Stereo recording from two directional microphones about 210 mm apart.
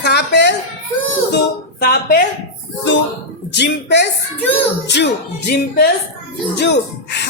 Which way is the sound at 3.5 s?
55° left (ahead or behind).